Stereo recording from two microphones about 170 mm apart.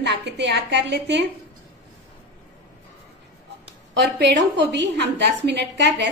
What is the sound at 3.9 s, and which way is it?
A woman's voice, 90° right.